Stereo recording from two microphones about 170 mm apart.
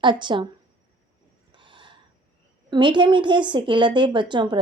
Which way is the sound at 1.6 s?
30° right (ahead or behind).